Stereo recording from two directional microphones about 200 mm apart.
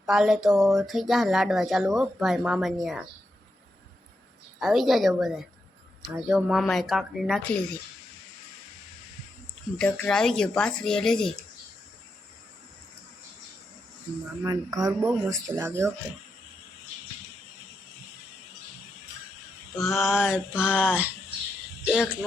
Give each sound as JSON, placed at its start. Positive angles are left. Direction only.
{"t": 0.0, "sound": "speech", "side_deg": 0}
{"t": 4.6, "sound": "speech", "side_deg": 0}
{"t": 9.7, "sound": "speech", "side_deg": 5}
{"t": 14.4, "sound": "speech", "side_deg": -20}
{"t": 19.8, "sound": "speech", "side_deg": 0}
{"t": 21.8, "sound": "speech", "side_deg": 0}